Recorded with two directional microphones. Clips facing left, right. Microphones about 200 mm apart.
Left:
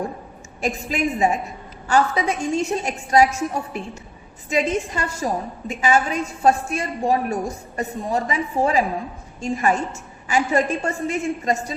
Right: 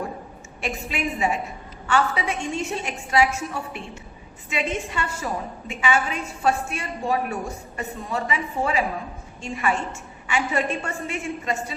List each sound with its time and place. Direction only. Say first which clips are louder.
0.6 s a woman's voice: left 5 dB; 40° left (ahead or behind)